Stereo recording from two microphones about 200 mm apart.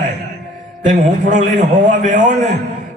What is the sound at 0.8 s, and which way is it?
A man's voice, 40° right (ahead or behind).